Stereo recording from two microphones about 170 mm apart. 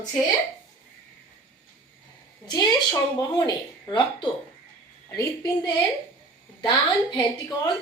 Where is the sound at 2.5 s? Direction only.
25° left (ahead or behind).